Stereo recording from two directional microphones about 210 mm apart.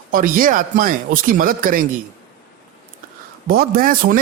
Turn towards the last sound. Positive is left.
turn(degrees=-45)  # may be behind; listen again after turning